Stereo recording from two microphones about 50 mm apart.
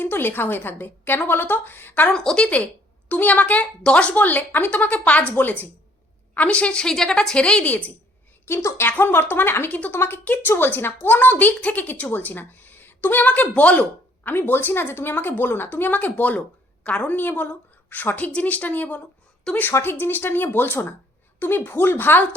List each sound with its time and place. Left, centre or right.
0.0 s a woman's voice: left
2.1 s a woman's voice: centre
3.1 s a woman's voice: left
5.3 s speech: left
6.3 s a woman's voice: left
6.8 s a woman's voice: centre
8.4 s a woman's voice: left
8.9 s a woman's voice: left
11.9 s a woman's voice: left
13.2 s a woman's voice: left
14.3 s a woman's voice: left
17.1 s a woman's voice: left
19.5 s a woman's voice: centre
19.8 s a woman's voice: left